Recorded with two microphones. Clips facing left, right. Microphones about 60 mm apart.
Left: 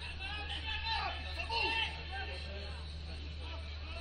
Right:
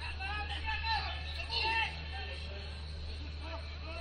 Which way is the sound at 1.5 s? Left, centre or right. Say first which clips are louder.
Right 2 dB; right.